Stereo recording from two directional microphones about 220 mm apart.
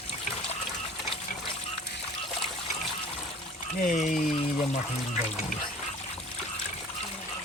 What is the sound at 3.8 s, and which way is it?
Speech, 35° left (ahead or behind).